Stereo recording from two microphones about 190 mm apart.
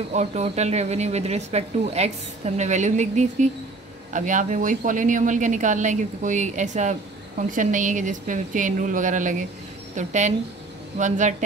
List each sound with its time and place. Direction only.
0.1 s speech: 35° right (ahead or behind)